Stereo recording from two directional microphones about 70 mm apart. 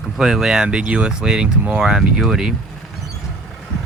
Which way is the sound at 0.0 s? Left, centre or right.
Centre.